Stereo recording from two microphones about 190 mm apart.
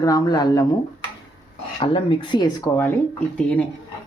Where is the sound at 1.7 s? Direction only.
30° left (ahead or behind).